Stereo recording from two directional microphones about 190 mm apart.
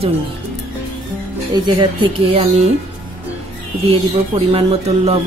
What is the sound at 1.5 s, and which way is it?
Music, 25° right (ahead or behind).